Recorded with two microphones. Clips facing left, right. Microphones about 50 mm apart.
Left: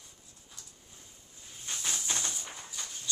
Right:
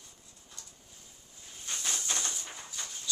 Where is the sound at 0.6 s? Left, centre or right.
Centre.